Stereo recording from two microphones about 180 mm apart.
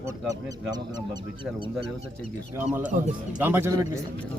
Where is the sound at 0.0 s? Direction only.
20° right (ahead or behind).